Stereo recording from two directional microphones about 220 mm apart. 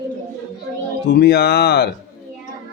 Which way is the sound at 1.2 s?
45° left (ahead or behind).